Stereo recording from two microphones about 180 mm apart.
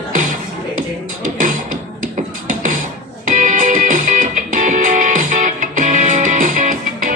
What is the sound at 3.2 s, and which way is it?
Music, 45° right (ahead or behind).